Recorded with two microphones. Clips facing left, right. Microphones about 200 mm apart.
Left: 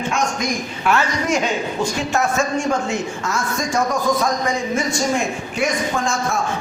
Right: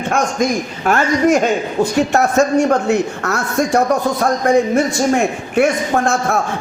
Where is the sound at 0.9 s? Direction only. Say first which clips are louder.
Right 6 dB; 45° right (ahead or behind).